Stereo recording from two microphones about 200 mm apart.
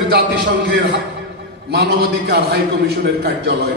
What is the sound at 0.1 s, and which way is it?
A man's voice, 65° right (ahead or behind).